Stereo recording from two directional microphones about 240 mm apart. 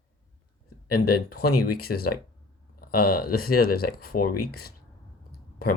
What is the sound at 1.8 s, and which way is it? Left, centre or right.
Speech, left.